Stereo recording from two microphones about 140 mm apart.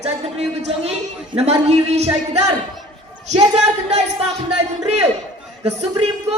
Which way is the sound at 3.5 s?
45° right (ahead or behind).